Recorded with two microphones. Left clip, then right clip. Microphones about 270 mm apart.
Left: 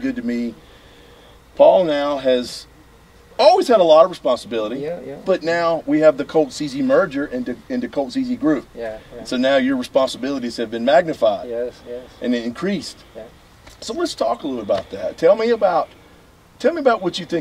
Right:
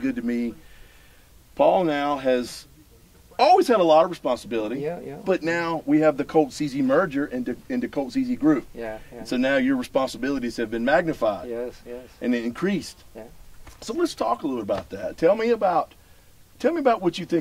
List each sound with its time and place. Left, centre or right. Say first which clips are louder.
0.0 s speech: left 3 dB; right
1.6 s speech: left 7 dB; right